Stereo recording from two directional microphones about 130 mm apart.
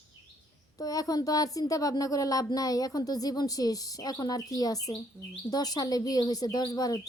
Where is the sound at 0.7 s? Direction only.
30° left (ahead or behind).